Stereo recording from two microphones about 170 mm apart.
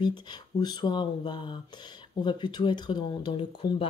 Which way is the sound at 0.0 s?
25° left (ahead or behind).